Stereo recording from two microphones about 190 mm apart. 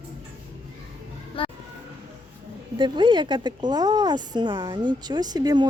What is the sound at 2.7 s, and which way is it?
A woman's voice, 25° right (ahead or behind).